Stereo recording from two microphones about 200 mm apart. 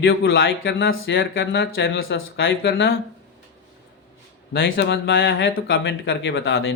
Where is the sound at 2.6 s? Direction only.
50° left (ahead or behind).